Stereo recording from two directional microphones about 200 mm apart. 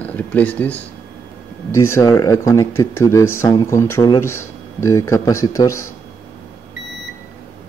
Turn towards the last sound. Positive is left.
turn(degrees=15)  # may be behind; listen again after turning